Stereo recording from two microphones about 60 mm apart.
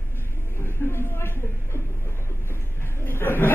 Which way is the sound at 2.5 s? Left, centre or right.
Left.